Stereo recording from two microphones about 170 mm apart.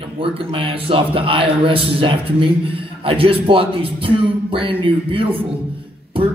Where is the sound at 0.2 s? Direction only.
30° right (ahead or behind).